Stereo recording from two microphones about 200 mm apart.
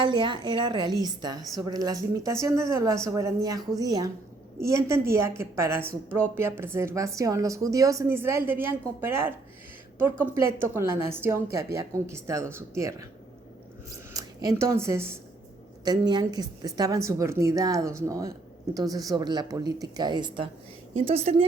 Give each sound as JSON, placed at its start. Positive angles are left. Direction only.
{"t": 0.0, "sound": "a woman's voice", "side_deg": -25}
{"t": 10.3, "sound": "a woman's voice", "side_deg": -10}
{"t": 14.1, "sound": "a woman's voice", "side_deg": -15}